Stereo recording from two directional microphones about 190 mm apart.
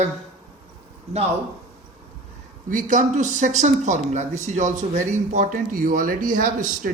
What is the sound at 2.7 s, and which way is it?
Speech, 45° right (ahead or behind).